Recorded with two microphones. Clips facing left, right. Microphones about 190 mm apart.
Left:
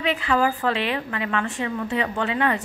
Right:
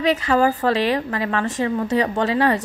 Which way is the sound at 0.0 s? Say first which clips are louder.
Right 4 dB; 40° right (ahead or behind).